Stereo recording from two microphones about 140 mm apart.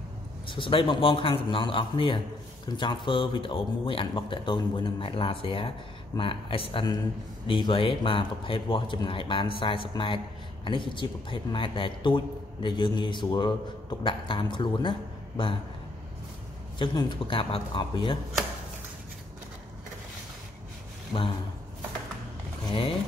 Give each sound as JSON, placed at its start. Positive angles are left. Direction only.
{"t": 0.5, "sound": "speech", "side_deg": 35}
{"t": 16.7, "sound": "speech", "side_deg": 35}
{"t": 21.1, "sound": "speech", "side_deg": 40}
{"t": 22.7, "sound": "speech", "side_deg": 40}